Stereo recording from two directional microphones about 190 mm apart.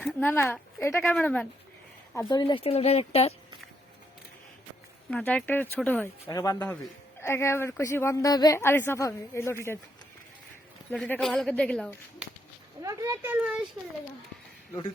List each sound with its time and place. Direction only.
0.0 s a sound: centre (ahead or behind)
0.3 s speech: 10° left (ahead or behind)
2.3 s speech: 25° left (ahead or behind)
5.1 s speech: 5° left (ahead or behind)
6.3 s speech: 20° left (ahead or behind)
10.9 s speech: 5° left (ahead or behind)
12.8 s speech: 15° right (ahead or behind)
13.3 s speech: 5° right (ahead or behind)